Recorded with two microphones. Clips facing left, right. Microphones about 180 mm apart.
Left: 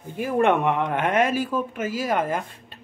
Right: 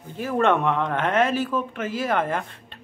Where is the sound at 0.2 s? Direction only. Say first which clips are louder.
Left 1 dB; 10° left (ahead or behind).